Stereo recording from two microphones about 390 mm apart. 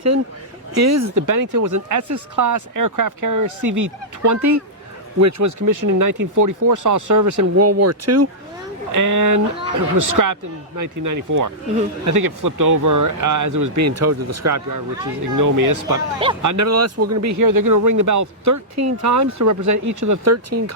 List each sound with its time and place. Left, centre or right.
0.8 s speech: right
8.9 s speech: right